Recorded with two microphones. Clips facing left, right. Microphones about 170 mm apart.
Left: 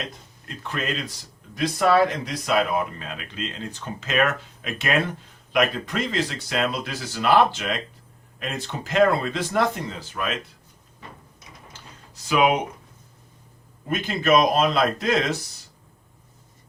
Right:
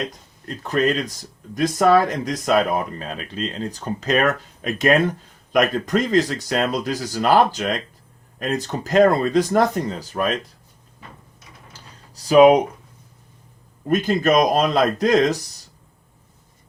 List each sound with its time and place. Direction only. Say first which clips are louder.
0.4 s speech: right 9 dB; 40° right (ahead or behind)
11.7 s a sound: even; 35° right (ahead or behind)
13.8 s speech: right 5 dB; 40° right (ahead or behind)